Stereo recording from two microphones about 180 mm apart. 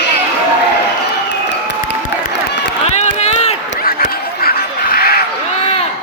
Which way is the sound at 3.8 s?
55° left (ahead or behind).